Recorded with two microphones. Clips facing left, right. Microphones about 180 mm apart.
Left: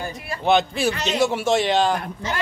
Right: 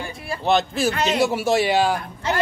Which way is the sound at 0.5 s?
Centre (ahead or behind).